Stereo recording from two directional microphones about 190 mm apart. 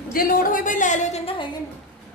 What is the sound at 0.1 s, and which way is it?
A woman's voice, 50° left (ahead or behind).